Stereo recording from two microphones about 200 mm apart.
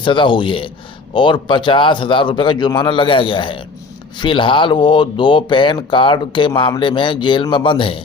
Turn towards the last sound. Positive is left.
turn(degrees=25)  # may be behind; listen again after turning